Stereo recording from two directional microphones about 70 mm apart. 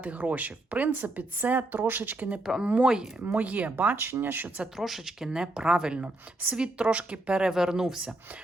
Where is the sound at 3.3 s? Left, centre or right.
Right.